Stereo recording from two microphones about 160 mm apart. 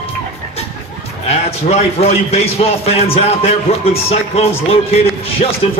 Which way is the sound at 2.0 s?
40° left (ahead or behind).